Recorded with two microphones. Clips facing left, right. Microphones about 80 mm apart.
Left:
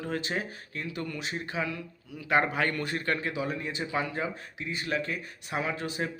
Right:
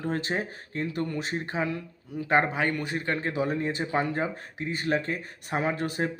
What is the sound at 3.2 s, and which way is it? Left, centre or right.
Speech, right.